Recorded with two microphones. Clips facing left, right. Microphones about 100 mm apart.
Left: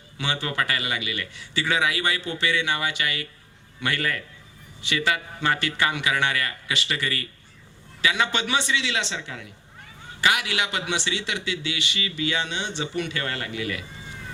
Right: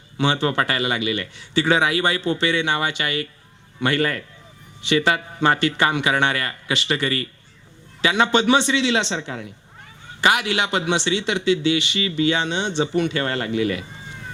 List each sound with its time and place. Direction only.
0.2 s a man's voice: 25° right (ahead or behind)